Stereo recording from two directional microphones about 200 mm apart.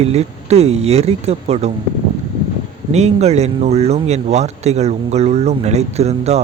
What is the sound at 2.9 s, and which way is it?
Speech, 35° right (ahead or behind).